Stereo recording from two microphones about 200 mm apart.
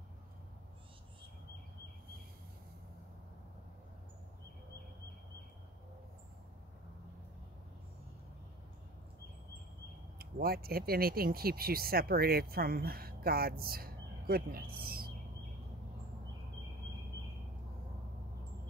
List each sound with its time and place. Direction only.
10.1 s speech: 50° right (ahead or behind)